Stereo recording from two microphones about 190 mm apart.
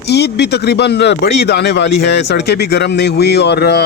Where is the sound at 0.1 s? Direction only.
60° left (ahead or behind).